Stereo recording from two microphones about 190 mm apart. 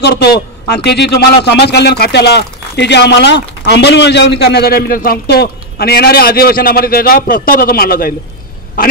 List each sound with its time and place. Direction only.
0.0 s a man's voice: 55° left (ahead or behind)